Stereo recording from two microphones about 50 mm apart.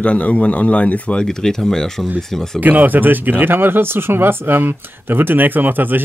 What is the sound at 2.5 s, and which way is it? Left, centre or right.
Speech, right.